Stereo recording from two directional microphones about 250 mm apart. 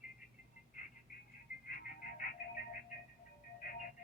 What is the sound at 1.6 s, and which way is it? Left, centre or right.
Music, left.